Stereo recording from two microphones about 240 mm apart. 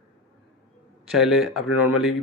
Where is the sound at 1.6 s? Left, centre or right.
Left.